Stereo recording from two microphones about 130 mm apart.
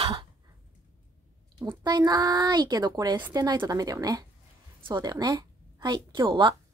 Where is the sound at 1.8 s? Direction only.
30° right (ahead or behind).